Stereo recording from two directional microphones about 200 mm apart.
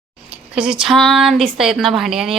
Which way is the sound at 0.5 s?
5° right (ahead or behind).